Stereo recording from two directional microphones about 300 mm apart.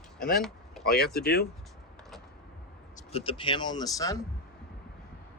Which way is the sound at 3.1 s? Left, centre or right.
Centre.